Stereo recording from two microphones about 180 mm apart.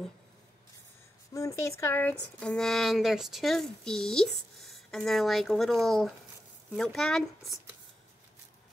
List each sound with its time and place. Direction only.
1.3 s speech: 15° left (ahead or behind)